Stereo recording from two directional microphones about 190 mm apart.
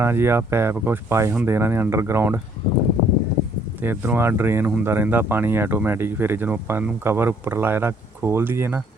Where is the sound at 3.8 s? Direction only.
10° right (ahead or behind).